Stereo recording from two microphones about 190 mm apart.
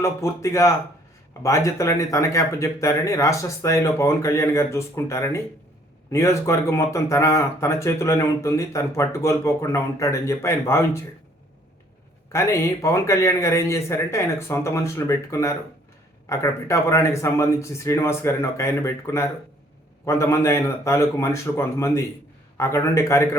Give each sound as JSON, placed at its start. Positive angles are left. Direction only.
{"t": 0.0, "sound": "a man's voice", "side_deg": 15}
{"t": 12.3, "sound": "a man's voice", "side_deg": 15}